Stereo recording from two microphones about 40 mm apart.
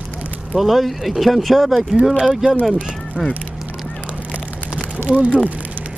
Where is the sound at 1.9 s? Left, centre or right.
Right.